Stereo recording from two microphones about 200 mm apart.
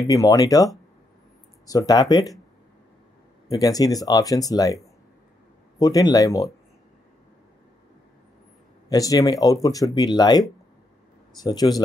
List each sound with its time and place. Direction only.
0.0 s speech: 15° left (ahead or behind)
1.7 s speech: 20° left (ahead or behind)
3.4 s speech: 15° left (ahead or behind)
5.8 s speech: 20° left (ahead or behind)
8.8 s speech: 20° left (ahead or behind)